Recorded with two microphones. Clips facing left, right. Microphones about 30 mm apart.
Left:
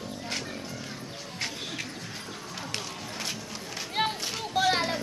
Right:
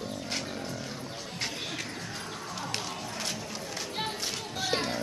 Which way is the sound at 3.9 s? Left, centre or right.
Left.